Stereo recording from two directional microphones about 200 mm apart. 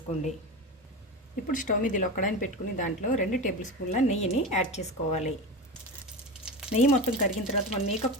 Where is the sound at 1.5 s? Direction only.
40° left (ahead or behind).